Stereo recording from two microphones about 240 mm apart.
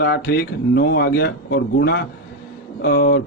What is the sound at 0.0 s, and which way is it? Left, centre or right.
A man's voice, left.